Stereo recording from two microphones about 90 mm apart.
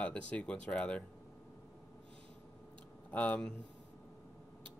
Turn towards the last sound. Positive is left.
turn(degrees=10)  # may be behind; listen again after turning